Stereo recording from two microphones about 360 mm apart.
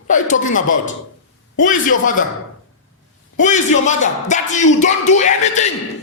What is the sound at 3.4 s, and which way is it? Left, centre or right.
Speech, centre.